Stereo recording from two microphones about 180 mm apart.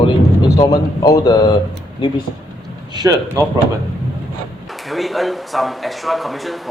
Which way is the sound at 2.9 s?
20° right (ahead or behind).